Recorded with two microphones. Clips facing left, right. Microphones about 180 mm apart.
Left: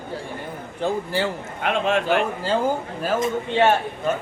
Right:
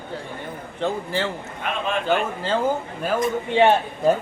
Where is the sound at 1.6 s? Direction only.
70° left (ahead or behind).